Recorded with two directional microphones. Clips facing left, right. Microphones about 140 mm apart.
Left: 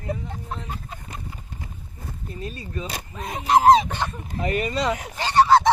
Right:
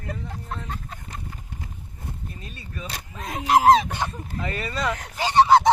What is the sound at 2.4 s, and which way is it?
Speech, 30° left (ahead or behind).